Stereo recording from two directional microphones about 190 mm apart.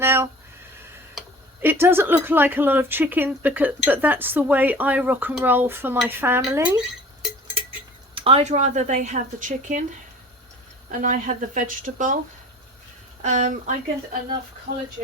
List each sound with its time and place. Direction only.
0.0 s a sound: 15° right (ahead or behind)
1.6 s speech: 10° right (ahead or behind)
8.1 s speech: 30° right (ahead or behind)
10.9 s speech: 45° right (ahead or behind)
13.2 s speech: 40° right (ahead or behind)